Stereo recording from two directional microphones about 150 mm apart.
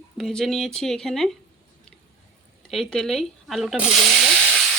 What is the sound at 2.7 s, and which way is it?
Speech, 5° left (ahead or behind).